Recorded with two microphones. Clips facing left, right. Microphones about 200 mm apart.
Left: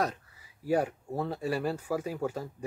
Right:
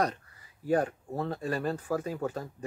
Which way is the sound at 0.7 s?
10° left (ahead or behind).